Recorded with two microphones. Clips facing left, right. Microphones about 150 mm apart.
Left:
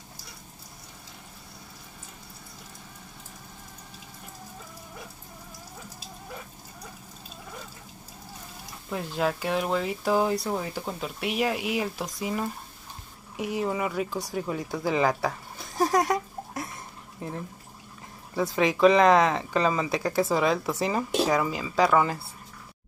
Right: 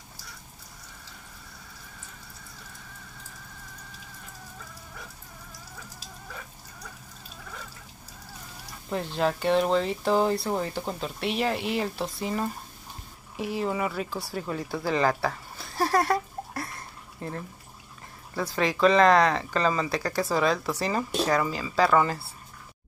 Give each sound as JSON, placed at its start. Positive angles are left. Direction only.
{"t": 8.9, "sound": "speech", "side_deg": 5}
{"t": 13.7, "sound": "speech", "side_deg": 5}
{"t": 14.1, "sound": "speech", "side_deg": 20}
{"t": 14.5, "sound": "speech", "side_deg": 0}
{"t": 15.7, "sound": "speech", "side_deg": 20}
{"t": 17.2, "sound": "speech", "side_deg": 10}
{"t": 20.1, "sound": "speech", "side_deg": 20}
{"t": 21.1, "sound": "speech", "side_deg": 5}
{"t": 21.5, "sound": "speech", "side_deg": 15}